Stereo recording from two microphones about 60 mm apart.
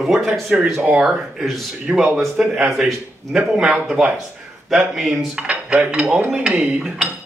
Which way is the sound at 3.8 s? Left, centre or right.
Centre.